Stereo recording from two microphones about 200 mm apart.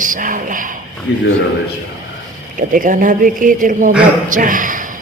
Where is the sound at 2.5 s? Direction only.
40° right (ahead or behind).